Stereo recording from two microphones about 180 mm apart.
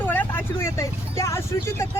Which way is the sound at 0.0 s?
10° left (ahead or behind).